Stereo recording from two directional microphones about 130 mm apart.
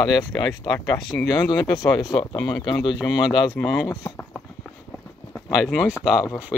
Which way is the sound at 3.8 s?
20° left (ahead or behind).